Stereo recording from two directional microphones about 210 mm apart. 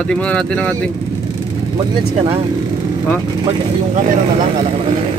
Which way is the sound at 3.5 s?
30° right (ahead or behind).